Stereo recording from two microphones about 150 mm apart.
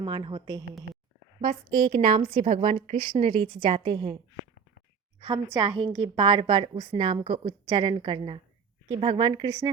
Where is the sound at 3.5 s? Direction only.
30° right (ahead or behind).